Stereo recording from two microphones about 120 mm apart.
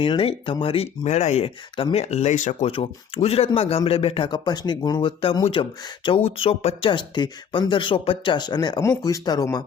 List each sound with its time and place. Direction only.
0.0 s speech: 50° left (ahead or behind); by 1.5 s 65° left (ahead or behind)
1.7 s speech: 55° left (ahead or behind); by 2.6 s 85° left
2.6 s speech: 50° left (ahead or behind)
6.9 s speech: 40° left (ahead or behind)